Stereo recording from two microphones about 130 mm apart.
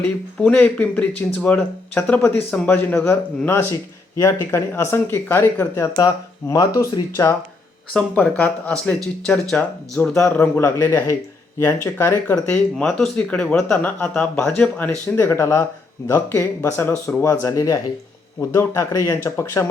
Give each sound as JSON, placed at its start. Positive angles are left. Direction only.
{"t": 0.0, "sound": "speech", "side_deg": 10}
{"t": 7.9, "sound": "speech", "side_deg": 10}
{"t": 12.7, "sound": "speech", "side_deg": 5}